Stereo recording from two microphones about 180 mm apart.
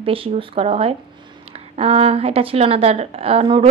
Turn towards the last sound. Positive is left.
turn(degrees=-30)  # may be behind; listen again after turning